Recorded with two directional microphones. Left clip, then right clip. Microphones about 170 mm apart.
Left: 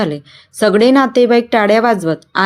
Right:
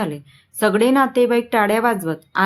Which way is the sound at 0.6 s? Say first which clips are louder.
Left 5 dB; 15° left (ahead or behind).